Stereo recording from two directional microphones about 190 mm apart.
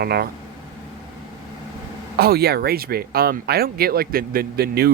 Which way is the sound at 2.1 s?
55° right (ahead or behind).